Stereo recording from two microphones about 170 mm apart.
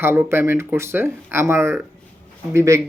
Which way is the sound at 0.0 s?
15° right (ahead or behind).